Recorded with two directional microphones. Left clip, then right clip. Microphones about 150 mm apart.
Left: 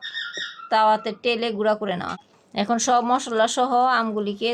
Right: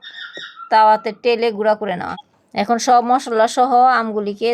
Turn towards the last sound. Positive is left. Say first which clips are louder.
# right 4 dB
turn(degrees=-35)  # may be behind; listen again after turning